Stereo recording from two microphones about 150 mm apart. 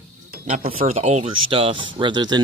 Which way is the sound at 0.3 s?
60° right (ahead or behind).